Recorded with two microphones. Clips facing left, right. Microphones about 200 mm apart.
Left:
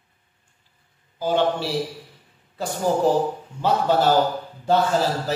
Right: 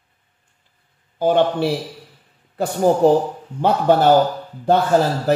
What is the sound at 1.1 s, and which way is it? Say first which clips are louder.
Speech: right 5 dB; 55° right (ahead or behind).